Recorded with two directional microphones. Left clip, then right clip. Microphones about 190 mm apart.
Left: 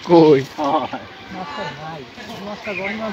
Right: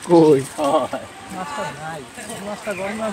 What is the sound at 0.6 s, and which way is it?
Speech, 30° right (ahead or behind).